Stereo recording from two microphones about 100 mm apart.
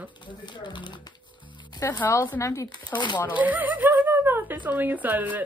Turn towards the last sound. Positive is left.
turn(degrees=-15)  # may be behind; listen again after turning